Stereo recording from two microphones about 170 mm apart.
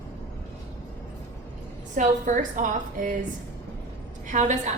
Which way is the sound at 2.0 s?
50° right (ahead or behind).